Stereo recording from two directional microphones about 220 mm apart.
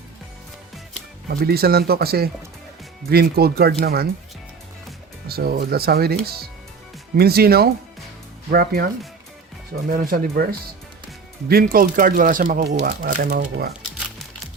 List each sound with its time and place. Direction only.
1.3 s speech: 45° right (ahead or behind)
5.3 s speech: 45° right (ahead or behind)
9.9 s speech: 40° right (ahead or behind)